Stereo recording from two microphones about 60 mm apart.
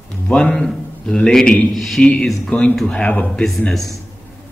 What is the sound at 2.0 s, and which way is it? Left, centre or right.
A man's voice, centre.